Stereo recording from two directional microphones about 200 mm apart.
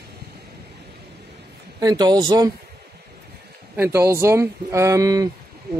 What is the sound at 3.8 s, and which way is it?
A man's voice, 15° right (ahead or behind).